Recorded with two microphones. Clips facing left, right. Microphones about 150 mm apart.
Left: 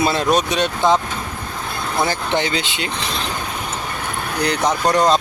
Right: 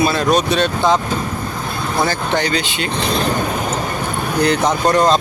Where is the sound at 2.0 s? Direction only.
20° left (ahead or behind).